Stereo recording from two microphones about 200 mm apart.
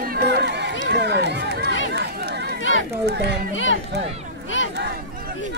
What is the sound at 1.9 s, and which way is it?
Run, 55° right (ahead or behind).